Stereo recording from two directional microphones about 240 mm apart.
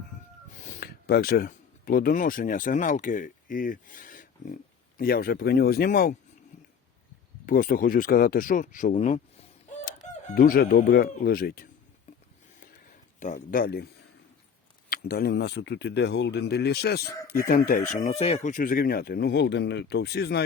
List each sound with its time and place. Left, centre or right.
0.5 s speech: left
7.4 s speech: left
12.5 s a sound: left
14.8 s speech: left